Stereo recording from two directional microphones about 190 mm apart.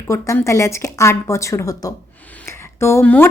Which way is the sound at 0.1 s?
15° left (ahead or behind).